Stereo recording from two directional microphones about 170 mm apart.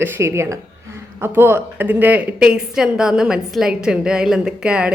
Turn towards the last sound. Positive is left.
turn(degrees=-5)  # may be behind; listen again after turning